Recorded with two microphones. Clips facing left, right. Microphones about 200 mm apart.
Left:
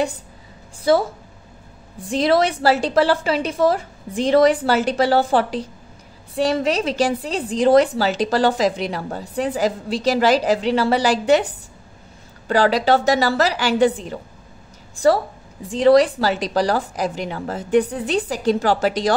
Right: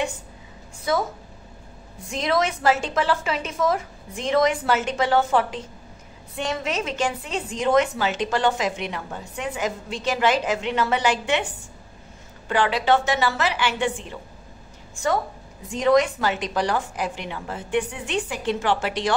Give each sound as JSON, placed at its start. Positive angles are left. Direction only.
{"t": 0.9, "sound": "a woman's voice", "side_deg": 30}
{"t": 2.0, "sound": "a woman's voice", "side_deg": 35}
{"t": 12.4, "sound": "a woman's voice", "side_deg": 40}